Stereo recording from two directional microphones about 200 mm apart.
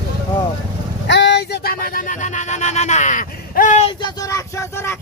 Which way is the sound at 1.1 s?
60° left (ahead or behind).